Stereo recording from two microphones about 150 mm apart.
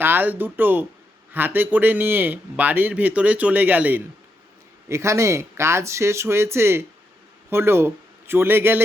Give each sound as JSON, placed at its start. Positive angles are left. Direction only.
{"t": 0.0, "sound": "a man's voice", "side_deg": -15}